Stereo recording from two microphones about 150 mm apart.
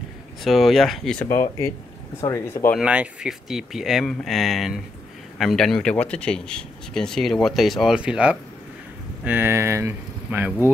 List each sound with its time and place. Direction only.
0.4 s speech: centre (ahead or behind)
2.2 s speech: 20° left (ahead or behind)
2.8 s speech: 5° right (ahead or behind)